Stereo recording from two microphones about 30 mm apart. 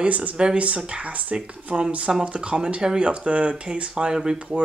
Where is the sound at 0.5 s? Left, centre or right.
Right.